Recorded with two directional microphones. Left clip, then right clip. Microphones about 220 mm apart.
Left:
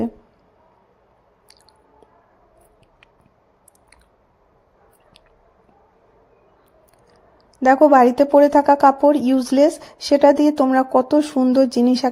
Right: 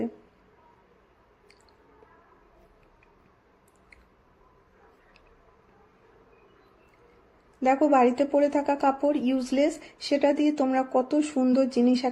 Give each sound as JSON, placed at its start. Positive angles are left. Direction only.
{"t": 7.6, "sound": "speech", "side_deg": 35}